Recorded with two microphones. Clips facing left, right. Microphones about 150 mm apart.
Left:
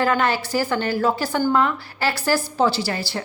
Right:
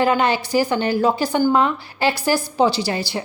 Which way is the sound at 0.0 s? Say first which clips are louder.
Right 2 dB; 20° right (ahead or behind).